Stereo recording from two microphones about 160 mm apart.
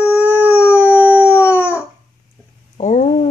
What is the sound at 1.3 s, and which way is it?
Howl, 15° left (ahead or behind).